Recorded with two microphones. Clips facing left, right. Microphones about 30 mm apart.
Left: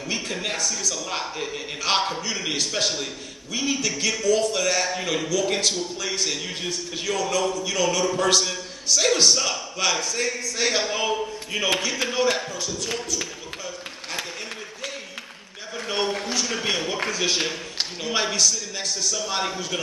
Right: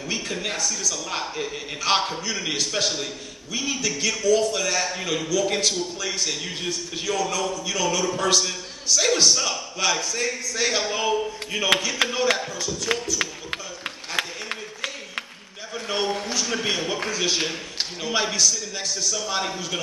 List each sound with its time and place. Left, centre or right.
0.1 s a man's voice: centre
12.0 s speech: right
16.4 s a man's voice: centre